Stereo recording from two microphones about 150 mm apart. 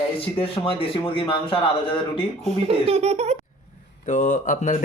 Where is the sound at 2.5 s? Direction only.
40° right (ahead or behind).